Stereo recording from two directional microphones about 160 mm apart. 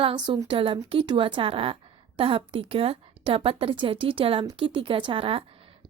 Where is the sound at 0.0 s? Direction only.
35° right (ahead or behind).